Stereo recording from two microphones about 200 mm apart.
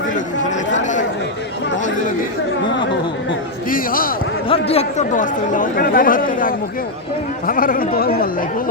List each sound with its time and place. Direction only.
0.4 s chatter: 35° left (ahead or behind)
3.7 s a sound: 45° left (ahead or behind)
4.4 s speech: 30° left (ahead or behind); by 8.7 s 45° left (ahead or behind)